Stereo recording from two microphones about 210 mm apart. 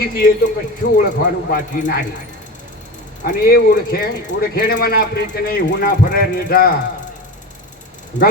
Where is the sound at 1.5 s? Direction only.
45° left (ahead or behind).